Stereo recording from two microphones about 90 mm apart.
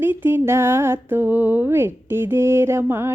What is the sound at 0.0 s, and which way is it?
Speech, 20° right (ahead or behind).